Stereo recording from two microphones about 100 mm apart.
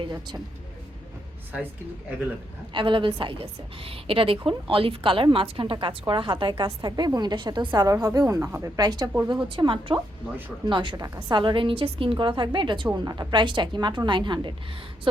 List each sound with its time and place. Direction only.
0.0 s a woman's voice: 45° right (ahead or behind)
2.7 s a woman's voice: 55° right (ahead or behind)
7.9 s speech: 35° right (ahead or behind)
9.3 s a woman's voice: 55° right (ahead or behind)
12.1 s a woman's voice: 50° right (ahead or behind)